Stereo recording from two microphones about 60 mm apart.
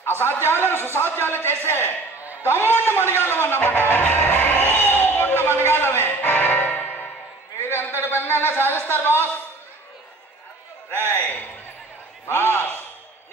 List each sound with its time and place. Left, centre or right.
0.0 s a man's voice: left
3.8 s music: left
5.6 s a man's voice: left
6.0 s music: left
7.6 s a sound: left
8.8 s speech: left
11.1 s speech: left